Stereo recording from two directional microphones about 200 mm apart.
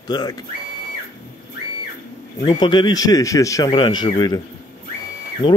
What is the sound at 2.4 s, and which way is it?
Speech, 20° left (ahead or behind).